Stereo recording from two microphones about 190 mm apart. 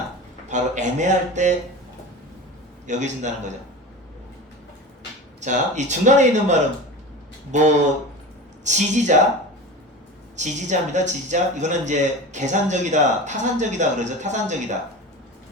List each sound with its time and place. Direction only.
0.4 s speech: 40° right (ahead or behind)
2.8 s speech: 40° right (ahead or behind)
5.4 s speech: 40° right (ahead or behind)
10.3 s speech: 40° right (ahead or behind)